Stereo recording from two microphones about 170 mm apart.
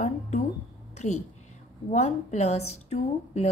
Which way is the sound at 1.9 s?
40° left (ahead or behind).